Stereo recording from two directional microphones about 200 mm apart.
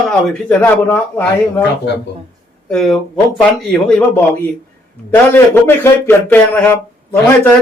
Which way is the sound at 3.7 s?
5° left (ahead or behind).